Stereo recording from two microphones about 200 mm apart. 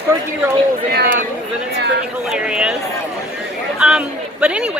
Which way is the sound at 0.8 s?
50° right (ahead or behind).